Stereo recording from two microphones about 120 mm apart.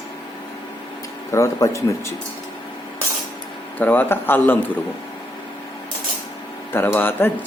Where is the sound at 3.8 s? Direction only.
15° left (ahead or behind).